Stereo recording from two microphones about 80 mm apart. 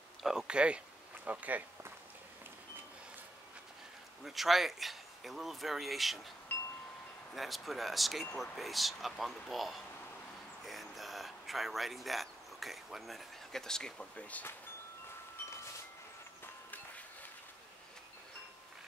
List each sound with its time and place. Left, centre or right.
0.2 s speech: centre
4.2 s speech: centre
6.5 s chime: left
7.3 s speech: centre
16.7 s a sound: left